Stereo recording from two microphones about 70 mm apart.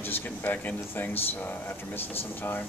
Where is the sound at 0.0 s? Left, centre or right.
Left.